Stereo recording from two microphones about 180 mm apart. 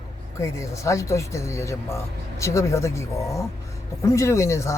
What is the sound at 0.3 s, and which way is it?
Speech, 15° left (ahead or behind).